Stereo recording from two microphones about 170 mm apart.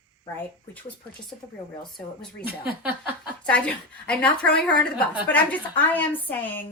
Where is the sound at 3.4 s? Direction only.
5° left (ahead or behind).